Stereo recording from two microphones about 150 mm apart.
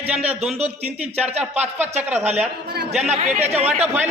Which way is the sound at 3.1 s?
45° right (ahead or behind).